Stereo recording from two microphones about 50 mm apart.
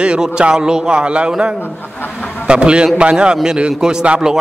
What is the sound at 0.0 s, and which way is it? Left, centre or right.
A man's voice, centre.